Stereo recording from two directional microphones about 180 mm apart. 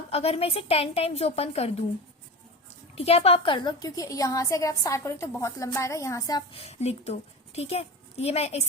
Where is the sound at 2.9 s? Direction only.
35° left (ahead or behind); by 6.4 s 20° left (ahead or behind).